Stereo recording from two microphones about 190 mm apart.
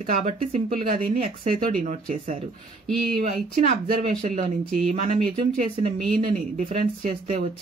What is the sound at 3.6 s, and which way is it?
Speech, 40° right (ahead or behind).